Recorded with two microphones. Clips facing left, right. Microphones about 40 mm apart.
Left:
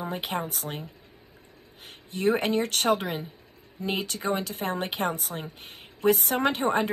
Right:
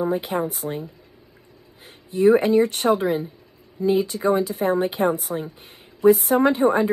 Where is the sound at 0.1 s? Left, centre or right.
Left.